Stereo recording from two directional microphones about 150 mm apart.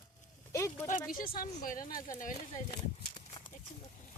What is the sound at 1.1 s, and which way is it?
Speech, 75° left (ahead or behind).